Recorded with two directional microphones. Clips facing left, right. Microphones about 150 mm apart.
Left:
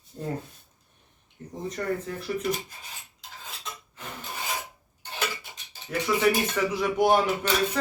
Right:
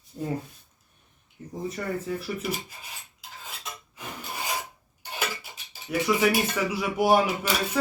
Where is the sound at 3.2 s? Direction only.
10° right (ahead or behind).